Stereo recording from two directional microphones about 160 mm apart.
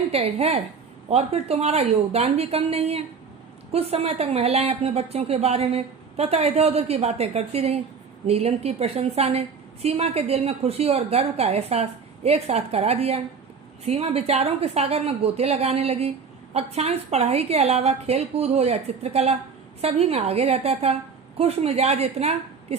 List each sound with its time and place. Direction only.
0.1 s a woman's voice: 40° right (ahead or behind)